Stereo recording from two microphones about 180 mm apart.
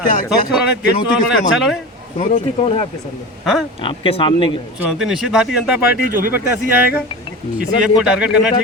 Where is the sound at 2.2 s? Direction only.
40° left (ahead or behind).